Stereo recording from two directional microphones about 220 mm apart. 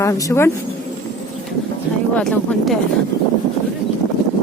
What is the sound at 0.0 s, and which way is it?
Speech, 15° left (ahead or behind).